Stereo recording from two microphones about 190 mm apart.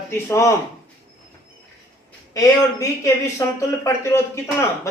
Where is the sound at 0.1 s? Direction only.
15° left (ahead or behind).